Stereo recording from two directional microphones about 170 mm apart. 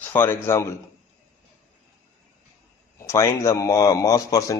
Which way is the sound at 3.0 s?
15° left (ahead or behind).